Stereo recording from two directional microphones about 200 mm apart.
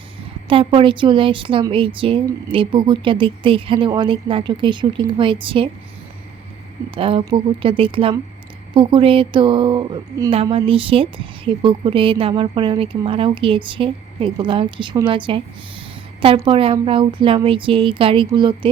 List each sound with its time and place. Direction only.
0.4 s speech: 25° right (ahead or behind)
6.9 s speech: 25° right (ahead or behind)
16.5 s speech: 25° right (ahead or behind)